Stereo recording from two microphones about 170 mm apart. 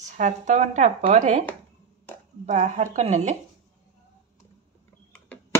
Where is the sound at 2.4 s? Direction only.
45° right (ahead or behind).